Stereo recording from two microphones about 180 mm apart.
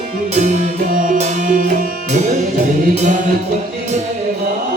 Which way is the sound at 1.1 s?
50° right (ahead or behind).